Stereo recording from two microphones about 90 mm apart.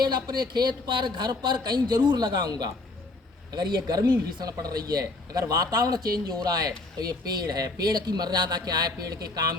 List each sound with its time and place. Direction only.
0.0 s speech: 55° right (ahead or behind)